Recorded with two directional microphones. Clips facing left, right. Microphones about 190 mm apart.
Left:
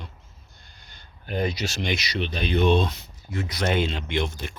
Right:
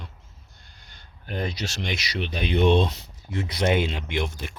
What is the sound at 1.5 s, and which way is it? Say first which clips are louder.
Speech: left 3 dB; 5° left (ahead or behind).